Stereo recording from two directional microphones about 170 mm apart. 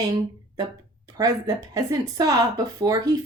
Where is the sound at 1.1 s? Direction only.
20° right (ahead or behind).